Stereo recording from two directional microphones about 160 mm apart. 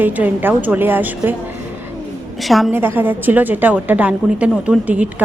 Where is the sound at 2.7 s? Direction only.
15° right (ahead or behind).